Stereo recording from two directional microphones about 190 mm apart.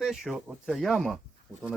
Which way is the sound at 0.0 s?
Centre (ahead or behind).